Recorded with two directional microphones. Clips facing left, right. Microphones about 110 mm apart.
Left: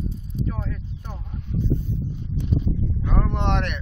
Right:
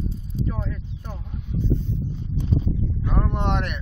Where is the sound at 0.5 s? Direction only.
5° right (ahead or behind).